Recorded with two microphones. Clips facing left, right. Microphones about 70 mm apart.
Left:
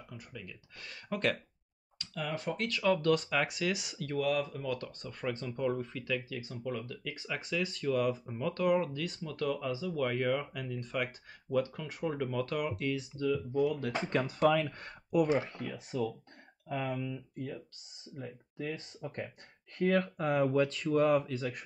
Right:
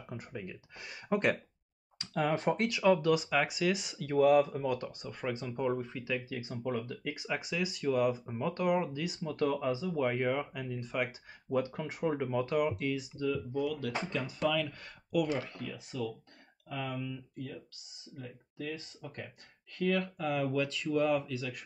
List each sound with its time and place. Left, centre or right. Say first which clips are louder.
0.1 s speech: right 7 dB; right
0.7 s speech: right 5 dB; centre
2.0 s speech: right 6 dB; right
2.6 s speech: even; centre
4.2 s speech: right 8 dB; right
7.2 s speech: left 1 dB; centre
9.2 s speech: right 4 dB; right; by 11.1 s centre
11.5 s speech: even; right; by 13.3 s centre
14.4 s speech: left 4 dB; left
15.7 s speech: left 4 dB; left